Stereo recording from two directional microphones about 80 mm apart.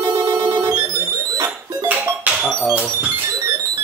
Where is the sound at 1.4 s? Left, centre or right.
Centre.